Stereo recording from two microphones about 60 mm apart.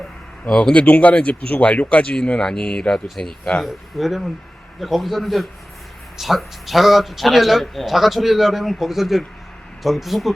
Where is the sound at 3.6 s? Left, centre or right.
Centre.